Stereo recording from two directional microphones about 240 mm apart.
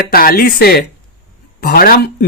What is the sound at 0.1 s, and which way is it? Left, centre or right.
Speech, left.